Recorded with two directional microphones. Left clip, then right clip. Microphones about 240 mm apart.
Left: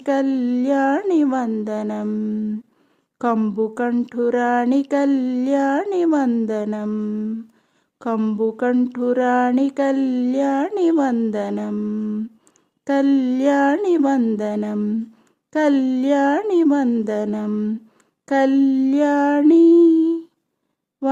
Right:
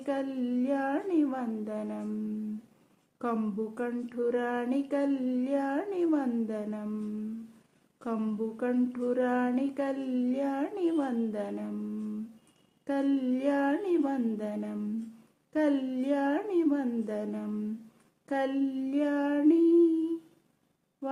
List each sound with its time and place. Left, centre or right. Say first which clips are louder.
0.0 s speech: left 13 dB; left
3.2 s speech: left 13 dB; left